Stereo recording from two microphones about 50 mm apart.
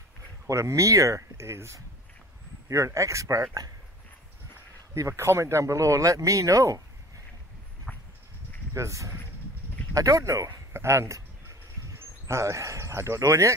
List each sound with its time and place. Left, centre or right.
0.5 s speech: right
2.7 s speech: right
4.9 s speech: right
7.9 s a sound: centre
8.7 s a man's voice: right